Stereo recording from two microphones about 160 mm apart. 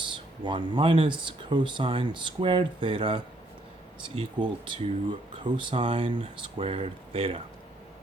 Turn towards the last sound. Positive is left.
turn(degrees=-40)  # may be behind; listen again after turning